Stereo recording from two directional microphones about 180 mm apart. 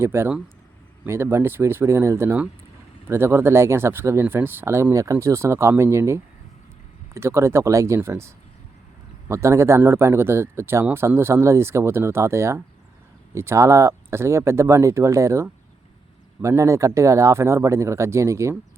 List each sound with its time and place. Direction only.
0.0 s speech: 15° right (ahead or behind)
9.3 s speech: 15° right (ahead or behind)